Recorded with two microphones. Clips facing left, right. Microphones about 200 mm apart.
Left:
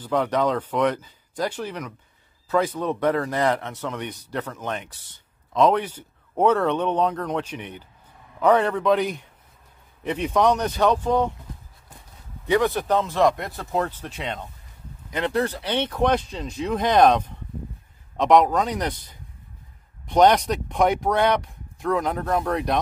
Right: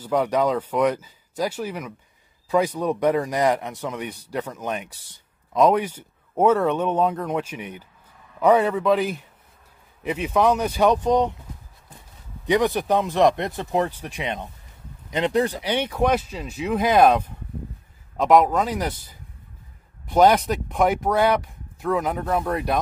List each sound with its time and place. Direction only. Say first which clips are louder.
0.0 s a man's voice: right 1 dB; 10° right (ahead or behind)
12.4 s a man's voice: right 1 dB; 15° right (ahead or behind)